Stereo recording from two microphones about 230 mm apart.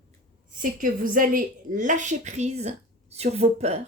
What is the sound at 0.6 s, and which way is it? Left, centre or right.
A woman's voice, right.